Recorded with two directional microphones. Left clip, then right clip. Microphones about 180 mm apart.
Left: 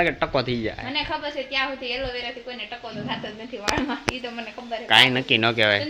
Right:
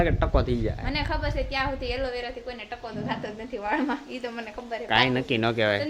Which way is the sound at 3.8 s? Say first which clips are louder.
Left 3 dB; 15° right (ahead or behind).